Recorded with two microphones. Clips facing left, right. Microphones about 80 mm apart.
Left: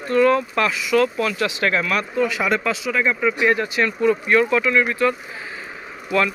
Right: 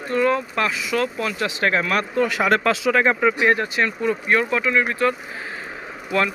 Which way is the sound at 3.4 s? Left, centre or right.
Right.